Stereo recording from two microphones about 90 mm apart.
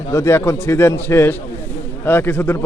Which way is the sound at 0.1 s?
30° left (ahead or behind).